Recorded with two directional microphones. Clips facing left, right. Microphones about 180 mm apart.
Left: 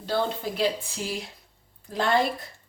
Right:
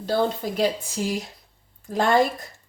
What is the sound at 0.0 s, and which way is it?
A woman's voice, 40° right (ahead or behind).